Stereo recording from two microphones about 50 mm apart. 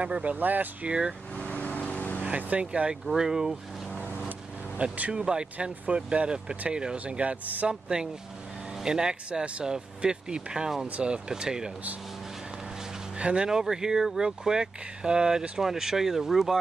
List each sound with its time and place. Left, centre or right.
0.0 s speech: right
0.8 s speech: centre
1.3 s vehicle: left
2.2 s speech: right; by 3.5 s centre
4.7 s speech: right
5.1 s speech: centre
7.6 s speech: centre
13.2 s speech: right